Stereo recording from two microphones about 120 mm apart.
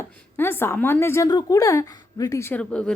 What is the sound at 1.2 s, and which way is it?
A woman's voice, 30° left (ahead or behind).